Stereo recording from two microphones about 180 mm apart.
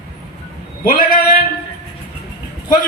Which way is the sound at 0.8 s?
55° left (ahead or behind).